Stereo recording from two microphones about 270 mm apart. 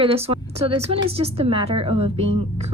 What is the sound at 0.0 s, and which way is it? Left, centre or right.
A woman's voice, right.